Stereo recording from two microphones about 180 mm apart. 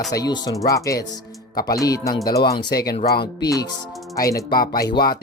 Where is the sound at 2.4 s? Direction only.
60° left (ahead or behind).